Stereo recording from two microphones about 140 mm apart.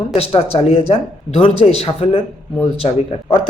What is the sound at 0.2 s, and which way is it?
A man's voice, 45° left (ahead or behind).